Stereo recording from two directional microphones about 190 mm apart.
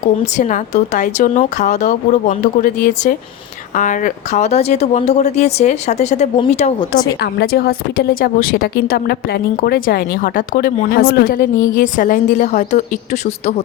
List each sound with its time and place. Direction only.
0.3 s speech: 40° left (ahead or behind)
7.2 s a woman's voice: 60° left (ahead or behind); by 13.5 s 35° left (ahead or behind)